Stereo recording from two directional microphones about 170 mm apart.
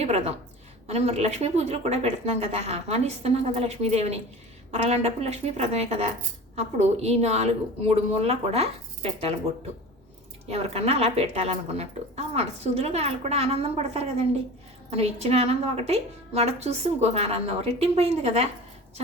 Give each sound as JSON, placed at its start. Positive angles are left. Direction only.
{"t": 0.0, "sound": "speech", "side_deg": -40}
{"t": 10.5, "sound": "speech", "side_deg": -40}